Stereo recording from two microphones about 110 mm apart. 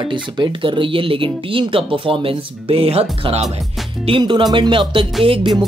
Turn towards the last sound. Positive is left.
turn(degrees=-55)  # may be behind; listen again after turning